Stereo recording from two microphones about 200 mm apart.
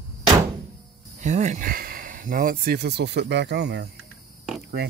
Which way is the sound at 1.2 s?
35° right (ahead or behind).